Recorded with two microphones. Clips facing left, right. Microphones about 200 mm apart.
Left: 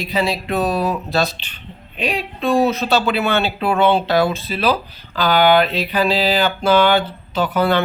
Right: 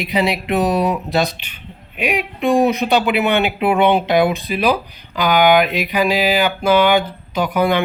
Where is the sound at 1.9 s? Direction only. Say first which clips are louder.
Right 2 dB; 15° right (ahead or behind).